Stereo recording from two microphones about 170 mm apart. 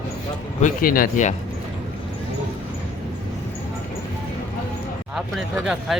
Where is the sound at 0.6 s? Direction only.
55° left (ahead or behind).